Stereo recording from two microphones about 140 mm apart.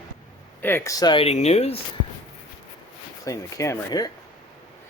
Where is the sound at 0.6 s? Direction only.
15° left (ahead or behind); by 1.2 s 30° left (ahead or behind).